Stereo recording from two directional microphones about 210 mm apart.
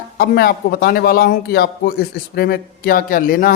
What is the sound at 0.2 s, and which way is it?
Speech, 45° left (ahead or behind).